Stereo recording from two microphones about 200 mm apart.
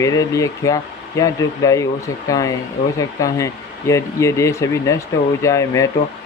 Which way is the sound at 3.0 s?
15° left (ahead or behind).